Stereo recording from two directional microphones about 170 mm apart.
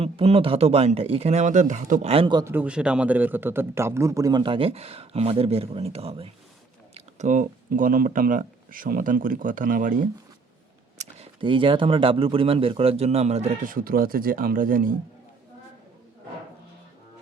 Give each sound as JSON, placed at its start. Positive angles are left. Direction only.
{"t": 0.0, "sound": "speech", "side_deg": -35}
{"t": 2.4, "sound": "a man's voice", "side_deg": -10}
{"t": 6.9, "sound": "speech", "side_deg": -45}
{"t": 10.9, "sound": "speech", "side_deg": -40}